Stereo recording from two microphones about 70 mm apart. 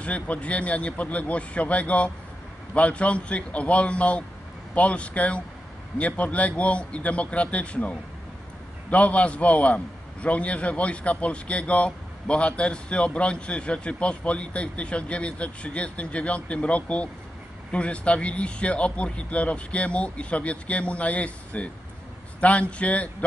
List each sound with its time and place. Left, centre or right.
0.0 s a man's voice: centre
8.9 s a man's voice: centre